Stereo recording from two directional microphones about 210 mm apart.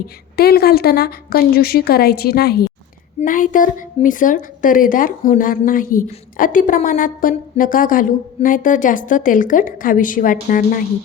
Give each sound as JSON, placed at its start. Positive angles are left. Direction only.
{"t": 0.3, "sound": "a woman's voice", "side_deg": 45}